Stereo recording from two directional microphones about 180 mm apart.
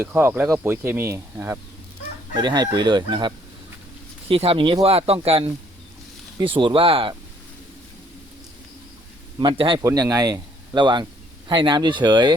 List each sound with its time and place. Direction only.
0.0 s speech: 10° right (ahead or behind); by 7.2 s 30° right (ahead or behind)
9.4 s speech: 25° right (ahead or behind)